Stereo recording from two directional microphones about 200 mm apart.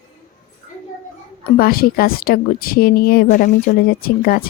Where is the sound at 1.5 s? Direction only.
50° left (ahead or behind).